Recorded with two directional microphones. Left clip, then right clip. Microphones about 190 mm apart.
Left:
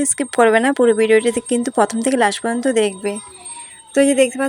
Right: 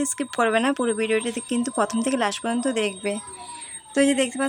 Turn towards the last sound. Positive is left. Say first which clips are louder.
# left 7 dB
turn(degrees=10)  # may be behind; listen again after turning